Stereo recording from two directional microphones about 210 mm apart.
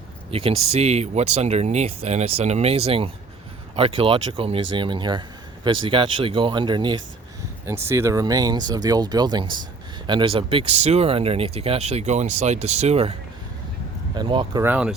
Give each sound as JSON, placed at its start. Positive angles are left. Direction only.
{"t": 0.3, "sound": "speech", "side_deg": -25}
{"t": 14.2, "sound": "speech", "side_deg": -20}
{"t": 14.6, "sound": "speech", "side_deg": -5}